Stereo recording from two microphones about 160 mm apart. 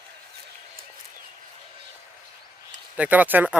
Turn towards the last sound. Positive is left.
turn(degrees=-10)  # may be behind; listen again after turning